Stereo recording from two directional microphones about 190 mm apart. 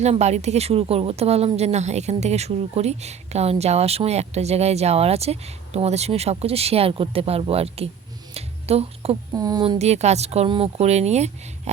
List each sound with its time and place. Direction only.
0.0 s speech: 35° right (ahead or behind)
8.3 s a sound: 35° right (ahead or behind)
9.3 s speech: 20° right (ahead or behind); by 11.7 s 35° right (ahead or behind)